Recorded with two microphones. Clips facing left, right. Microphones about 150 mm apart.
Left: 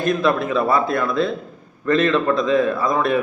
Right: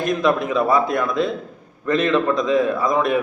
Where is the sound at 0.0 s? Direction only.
15° right (ahead or behind).